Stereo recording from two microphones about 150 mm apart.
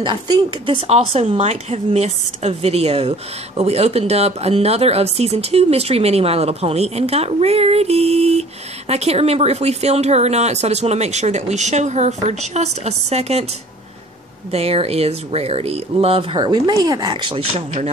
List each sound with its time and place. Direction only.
0.0 s speech: 30° right (ahead or behind)
14.5 s speech: 40° right (ahead or behind)